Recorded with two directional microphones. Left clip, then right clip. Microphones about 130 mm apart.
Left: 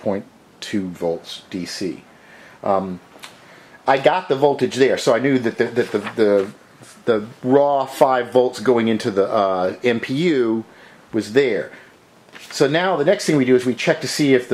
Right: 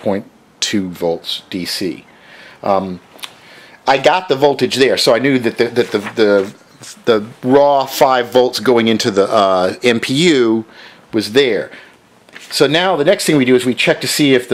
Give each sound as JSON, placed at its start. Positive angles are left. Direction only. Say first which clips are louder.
{"t": 0.0, "sound": "speech", "louder": "right 5 dB", "side_deg": -35}
{"t": 1.0, "sound": "speech", "louder": "right 6 dB", "side_deg": -25}